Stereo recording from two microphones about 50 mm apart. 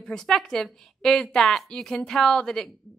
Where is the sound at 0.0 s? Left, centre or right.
Centre.